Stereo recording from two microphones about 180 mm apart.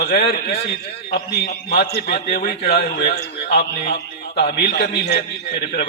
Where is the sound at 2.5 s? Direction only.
60° left (ahead or behind).